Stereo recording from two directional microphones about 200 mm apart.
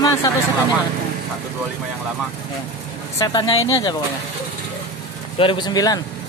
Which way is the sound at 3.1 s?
20° left (ahead or behind).